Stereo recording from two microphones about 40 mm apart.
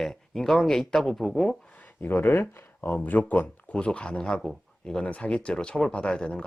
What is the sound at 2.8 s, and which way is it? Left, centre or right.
Speech, left.